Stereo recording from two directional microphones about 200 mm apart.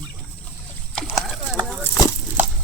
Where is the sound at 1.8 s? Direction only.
15° left (ahead or behind).